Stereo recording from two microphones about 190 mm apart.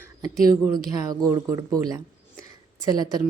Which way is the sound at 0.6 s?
20° right (ahead or behind).